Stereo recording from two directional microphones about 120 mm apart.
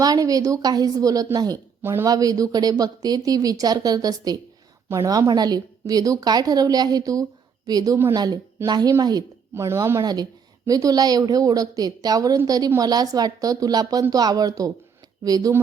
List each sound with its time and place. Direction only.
0.0 s a woman's voice: 30° right (ahead or behind)
1.8 s speech: 20° right (ahead or behind)
2.0 s a woman's voice: 30° right (ahead or behind)
10.0 s a woman's voice: 35° right (ahead or behind)